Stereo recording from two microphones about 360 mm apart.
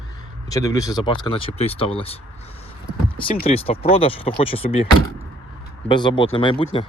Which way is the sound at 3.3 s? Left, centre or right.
Centre.